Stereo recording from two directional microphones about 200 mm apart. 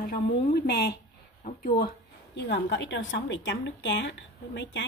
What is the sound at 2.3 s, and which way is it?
A woman's voice, 55° left (ahead or behind).